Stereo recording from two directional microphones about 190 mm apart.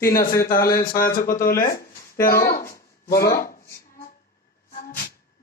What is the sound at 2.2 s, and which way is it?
Speech, 50° left (ahead or behind).